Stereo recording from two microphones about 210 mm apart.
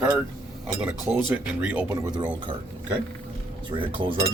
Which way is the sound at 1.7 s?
10° right (ahead or behind).